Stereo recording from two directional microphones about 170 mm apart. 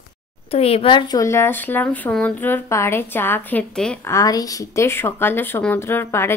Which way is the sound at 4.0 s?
15° left (ahead or behind).